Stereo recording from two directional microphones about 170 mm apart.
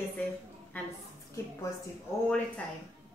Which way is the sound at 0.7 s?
10° left (ahead or behind).